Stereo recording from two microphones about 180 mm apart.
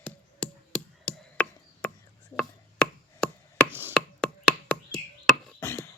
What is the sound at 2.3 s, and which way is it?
Chopping, 5° left (ahead or behind).